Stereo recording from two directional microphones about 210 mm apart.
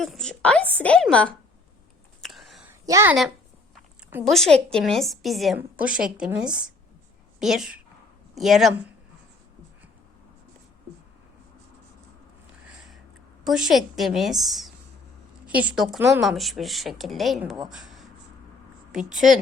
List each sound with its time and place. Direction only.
0.0 s a sound: centre (ahead or behind)
2.2 s whispering: centre (ahead or behind)
2.8 s a woman's voice: 15° right (ahead or behind)
4.2 s a woman's voice: centre (ahead or behind)
13.4 s a woman's voice: centre (ahead or behind)
17.7 s a sound: centre (ahead or behind)
18.9 s a woman's voice: 5° right (ahead or behind)